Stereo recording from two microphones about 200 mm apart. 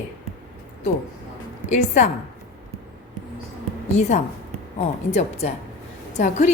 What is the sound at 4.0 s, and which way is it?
A woman's voice, 35° left (ahead or behind).